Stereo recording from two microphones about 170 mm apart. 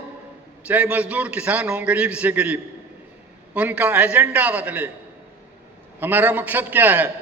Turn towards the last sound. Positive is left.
turn(degrees=-10)  # may be behind; listen again after turning